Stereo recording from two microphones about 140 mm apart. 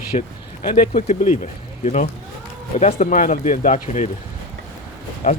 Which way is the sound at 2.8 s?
55° left (ahead or behind).